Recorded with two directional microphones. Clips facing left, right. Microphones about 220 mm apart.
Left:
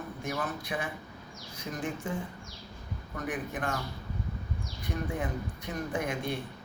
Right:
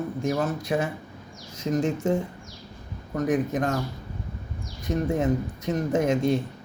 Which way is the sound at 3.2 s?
40° right (ahead or behind).